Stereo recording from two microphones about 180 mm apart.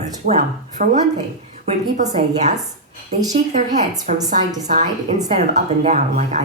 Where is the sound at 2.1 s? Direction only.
40° right (ahead or behind).